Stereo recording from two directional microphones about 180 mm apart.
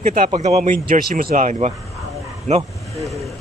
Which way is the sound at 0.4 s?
40° right (ahead or behind).